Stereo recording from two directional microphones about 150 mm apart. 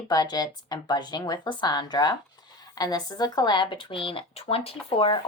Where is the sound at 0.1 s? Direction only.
25° left (ahead or behind).